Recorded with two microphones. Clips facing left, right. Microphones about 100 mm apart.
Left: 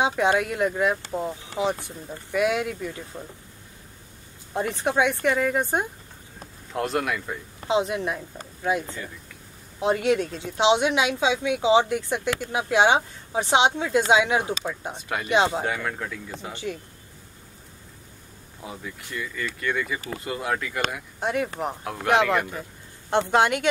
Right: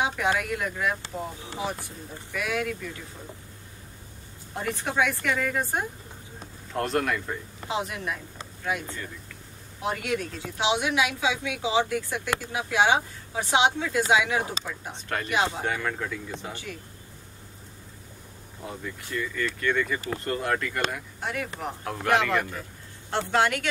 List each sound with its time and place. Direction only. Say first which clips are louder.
0.0 s a woman's voice: left 4 dB; 25° left (ahead or behind)
4.6 s a woman's voice: left 4 dB; 20° left (ahead or behind)
6.7 s speech: even; 5° left (ahead or behind)
7.6 s a woman's voice: left 7 dB; 20° left (ahead or behind)
14.9 s speech: right 1 dB; 10° left (ahead or behind)
15.2 s a woman's voice: left 6 dB; 25° left (ahead or behind)
15.6 s speech: left 1 dB; 5° left (ahead or behind)
18.6 s speech: right 1 dB; 5° left (ahead or behind)
21.2 s a woman's voice: left 7 dB; 20° left (ahead or behind); by 22.7 s 5° left (ahead or behind)
23.1 s a woman's voice: left 4 dB; 20° left (ahead or behind)